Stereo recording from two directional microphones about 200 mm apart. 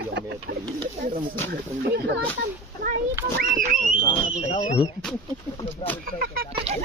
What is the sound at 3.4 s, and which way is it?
Speech, 45° right (ahead or behind).